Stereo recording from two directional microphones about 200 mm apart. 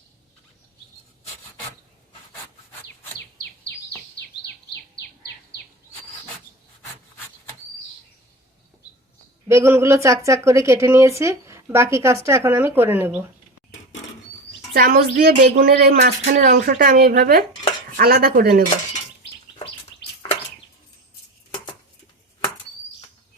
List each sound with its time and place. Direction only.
4.4 s bird: 55° left (ahead or behind)
9.5 s speech: 15° right (ahead or behind)
14.7 s a woman's voice: 45° right (ahead or behind)